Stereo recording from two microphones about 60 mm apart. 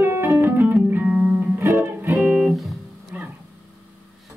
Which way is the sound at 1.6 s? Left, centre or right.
Right.